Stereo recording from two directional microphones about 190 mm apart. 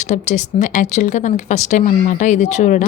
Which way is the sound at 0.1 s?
40° left (ahead or behind).